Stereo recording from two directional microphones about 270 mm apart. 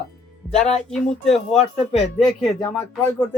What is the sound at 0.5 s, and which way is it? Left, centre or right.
Speech, left.